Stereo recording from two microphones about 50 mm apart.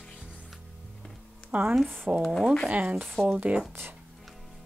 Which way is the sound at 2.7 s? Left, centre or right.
Right.